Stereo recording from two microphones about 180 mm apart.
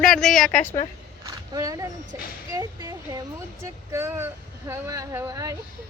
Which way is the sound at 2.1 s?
15° right (ahead or behind).